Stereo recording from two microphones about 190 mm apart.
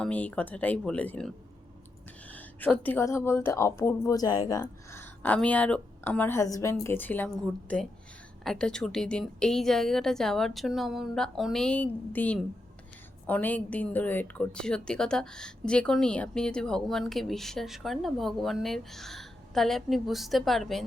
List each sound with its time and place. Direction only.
0.0 s a woman's voice: 5° left (ahead or behind)
8.4 s a woman's voice: 5° left (ahead or behind)